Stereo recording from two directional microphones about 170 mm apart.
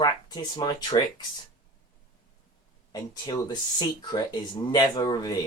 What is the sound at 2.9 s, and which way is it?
Speech, 25° left (ahead or behind).